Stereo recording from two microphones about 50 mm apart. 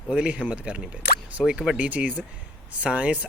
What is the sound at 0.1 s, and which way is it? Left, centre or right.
Speech, right.